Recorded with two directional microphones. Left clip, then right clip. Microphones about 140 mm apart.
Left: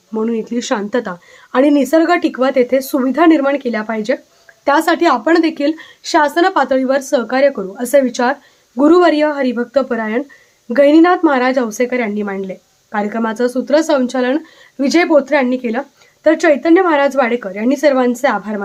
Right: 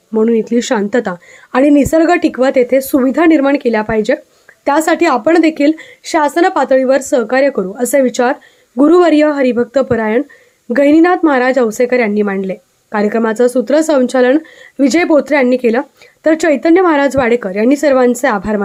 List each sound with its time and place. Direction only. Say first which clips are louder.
0.1 s a woman's voice: right 7 dB; 30° right (ahead or behind)